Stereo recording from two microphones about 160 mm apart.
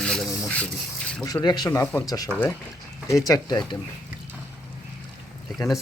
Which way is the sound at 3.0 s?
20° left (ahead or behind).